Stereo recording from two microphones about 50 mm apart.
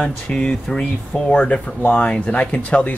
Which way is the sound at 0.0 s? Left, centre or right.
Centre.